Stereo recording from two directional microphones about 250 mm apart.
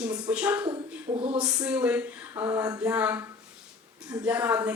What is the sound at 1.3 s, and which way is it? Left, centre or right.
A woman's voice, centre.